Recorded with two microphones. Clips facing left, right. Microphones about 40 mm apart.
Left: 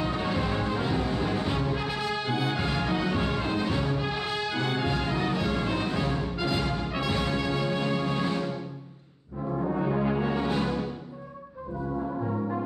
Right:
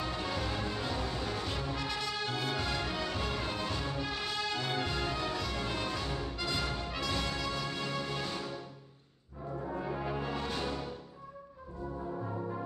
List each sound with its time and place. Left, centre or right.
0.0 s music: left
9.5 s brass instrument: left